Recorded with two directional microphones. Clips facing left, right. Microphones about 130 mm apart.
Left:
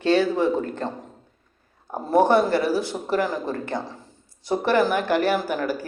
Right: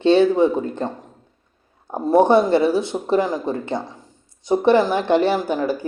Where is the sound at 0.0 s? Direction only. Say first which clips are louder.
Right 5 dB; 25° right (ahead or behind).